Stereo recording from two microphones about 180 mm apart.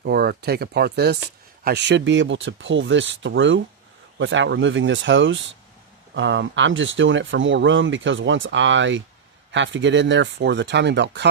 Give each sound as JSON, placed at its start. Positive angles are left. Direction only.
{"t": 0.0, "sound": "speech", "side_deg": -60}